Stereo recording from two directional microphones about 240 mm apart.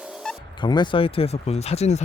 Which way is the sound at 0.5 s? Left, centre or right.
Centre.